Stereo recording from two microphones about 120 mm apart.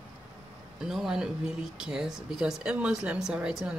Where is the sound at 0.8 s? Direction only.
5° right (ahead or behind).